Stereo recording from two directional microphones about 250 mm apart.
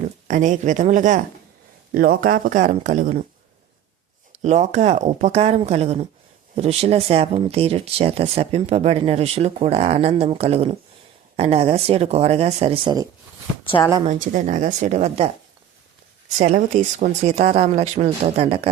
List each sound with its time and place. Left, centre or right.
0.3 s speech: right
4.4 s speech: right
16.4 s speech: right